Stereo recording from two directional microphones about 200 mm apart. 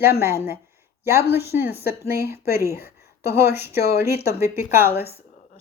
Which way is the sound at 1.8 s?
50° left (ahead or behind).